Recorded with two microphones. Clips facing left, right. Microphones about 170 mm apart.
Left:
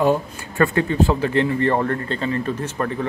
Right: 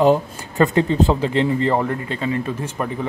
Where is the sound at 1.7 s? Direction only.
10° right (ahead or behind).